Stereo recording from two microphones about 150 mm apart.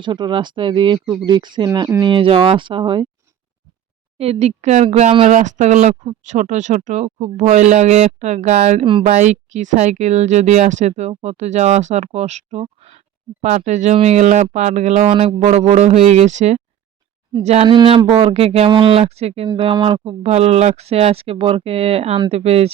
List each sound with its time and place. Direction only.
0.0 s speech: 30° right (ahead or behind)
4.2 s speech: 45° right (ahead or behind)
9.1 s speech: 50° right (ahead or behind)
15.1 s speech: 35° right (ahead or behind)
17.7 s speech: 35° right (ahead or behind)